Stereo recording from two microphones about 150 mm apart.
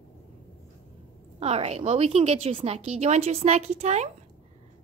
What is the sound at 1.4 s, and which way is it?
A woman's voice, 45° right (ahead or behind).